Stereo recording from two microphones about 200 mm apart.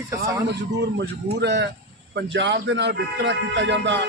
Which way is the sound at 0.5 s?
60° right (ahead or behind).